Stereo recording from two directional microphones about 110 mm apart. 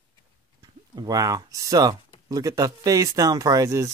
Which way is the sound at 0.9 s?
35° right (ahead or behind).